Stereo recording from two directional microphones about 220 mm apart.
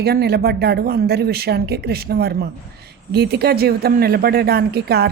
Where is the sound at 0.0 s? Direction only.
45° right (ahead or behind).